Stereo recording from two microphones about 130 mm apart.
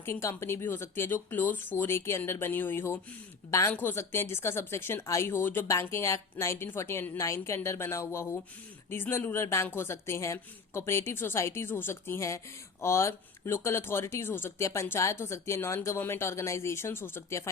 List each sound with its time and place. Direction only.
0.0 s speech: 20° left (ahead or behind)